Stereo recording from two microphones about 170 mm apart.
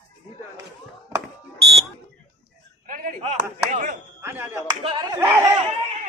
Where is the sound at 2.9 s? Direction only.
50° right (ahead or behind).